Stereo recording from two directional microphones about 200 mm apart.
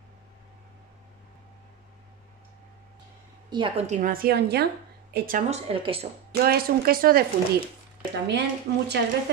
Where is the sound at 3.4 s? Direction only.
25° right (ahead or behind); by 5.6 s 45° right (ahead or behind).